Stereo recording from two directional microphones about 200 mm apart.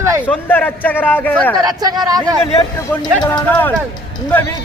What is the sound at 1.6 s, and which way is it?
Speech, 20° right (ahead or behind).